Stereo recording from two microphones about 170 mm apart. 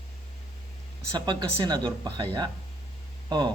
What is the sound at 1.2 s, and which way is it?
Speech, 25° right (ahead or behind).